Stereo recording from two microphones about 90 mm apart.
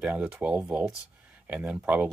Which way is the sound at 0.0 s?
15° right (ahead or behind).